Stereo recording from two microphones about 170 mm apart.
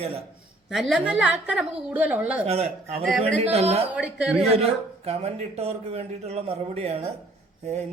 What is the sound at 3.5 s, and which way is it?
Speech, 40° right (ahead or behind).